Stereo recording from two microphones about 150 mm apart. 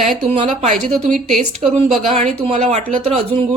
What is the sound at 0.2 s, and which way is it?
Speech, 50° right (ahead or behind).